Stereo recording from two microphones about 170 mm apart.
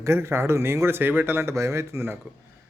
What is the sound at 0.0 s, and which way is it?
Speech, 15° right (ahead or behind).